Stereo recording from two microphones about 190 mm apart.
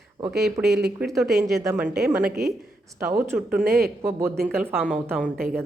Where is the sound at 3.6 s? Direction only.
50° right (ahead or behind).